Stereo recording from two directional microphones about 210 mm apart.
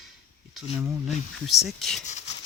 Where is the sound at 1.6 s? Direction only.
Centre (ahead or behind).